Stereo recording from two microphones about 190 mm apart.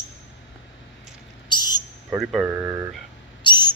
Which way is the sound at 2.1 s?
Centre (ahead or behind).